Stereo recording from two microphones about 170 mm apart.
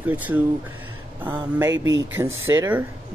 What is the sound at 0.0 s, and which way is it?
Speech, 10° right (ahead or behind).